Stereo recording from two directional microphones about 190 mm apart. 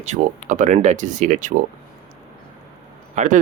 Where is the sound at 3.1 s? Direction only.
40° right (ahead or behind).